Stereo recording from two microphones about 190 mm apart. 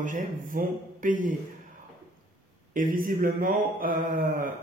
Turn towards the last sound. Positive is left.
turn(degrees=-45)  # may be behind; listen again after turning